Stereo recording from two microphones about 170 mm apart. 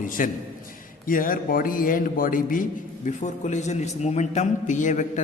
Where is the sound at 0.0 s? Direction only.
50° left (ahead or behind).